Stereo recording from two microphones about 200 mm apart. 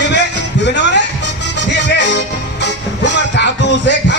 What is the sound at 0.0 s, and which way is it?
Music, 60° left (ahead or behind).